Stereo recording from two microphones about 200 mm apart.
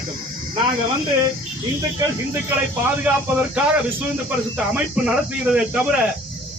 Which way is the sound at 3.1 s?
5° right (ahead or behind).